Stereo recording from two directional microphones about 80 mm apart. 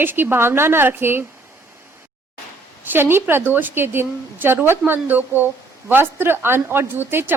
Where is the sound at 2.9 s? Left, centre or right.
Right.